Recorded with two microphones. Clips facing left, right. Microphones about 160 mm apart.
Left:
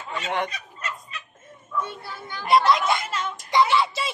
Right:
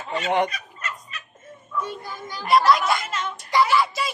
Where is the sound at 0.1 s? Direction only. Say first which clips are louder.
Right 5 dB; 20° right (ahead or behind).